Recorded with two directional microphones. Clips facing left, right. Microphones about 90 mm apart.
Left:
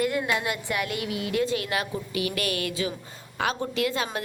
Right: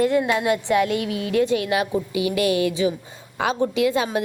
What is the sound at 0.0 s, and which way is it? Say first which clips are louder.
A woman's voice: right 6 dB; 20° right (ahead or behind).